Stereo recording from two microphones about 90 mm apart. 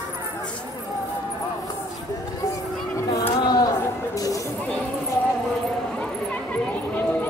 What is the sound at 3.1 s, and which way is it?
Music, 40° left (ahead or behind).